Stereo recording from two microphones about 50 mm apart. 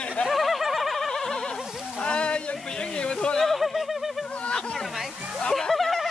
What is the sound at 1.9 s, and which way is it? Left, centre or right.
Speech, left.